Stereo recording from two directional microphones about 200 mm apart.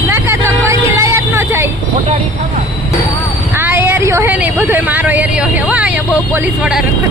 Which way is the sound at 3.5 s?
10° right (ahead or behind).